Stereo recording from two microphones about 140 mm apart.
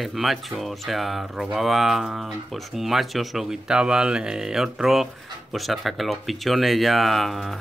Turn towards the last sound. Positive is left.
turn(degrees=0)  # may be behind; listen again after turning